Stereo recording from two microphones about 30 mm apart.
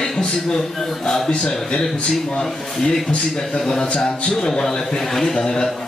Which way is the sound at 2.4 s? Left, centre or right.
Centre.